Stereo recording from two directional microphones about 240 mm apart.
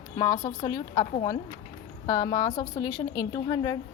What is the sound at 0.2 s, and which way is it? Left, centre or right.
A woman's voice, centre.